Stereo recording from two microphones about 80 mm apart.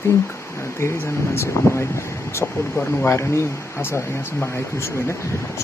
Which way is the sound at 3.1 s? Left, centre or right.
Left.